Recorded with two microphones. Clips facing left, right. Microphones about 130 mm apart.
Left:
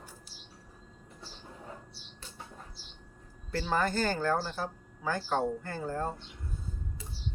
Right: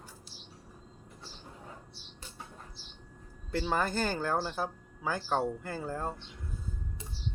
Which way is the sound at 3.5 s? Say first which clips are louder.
Left 1 dB; 15° right (ahead or behind).